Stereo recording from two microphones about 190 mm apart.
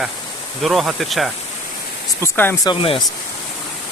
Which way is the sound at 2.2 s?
10° left (ahead or behind).